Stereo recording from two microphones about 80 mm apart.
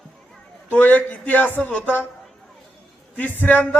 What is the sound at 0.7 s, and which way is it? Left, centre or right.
A man's voice, left.